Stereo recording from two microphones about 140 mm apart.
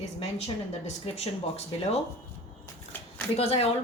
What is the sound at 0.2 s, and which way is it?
Speech, 45° left (ahead or behind).